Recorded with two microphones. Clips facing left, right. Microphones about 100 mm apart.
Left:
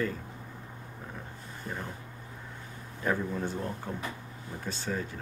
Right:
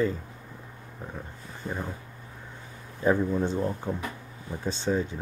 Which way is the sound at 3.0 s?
20° right (ahead or behind).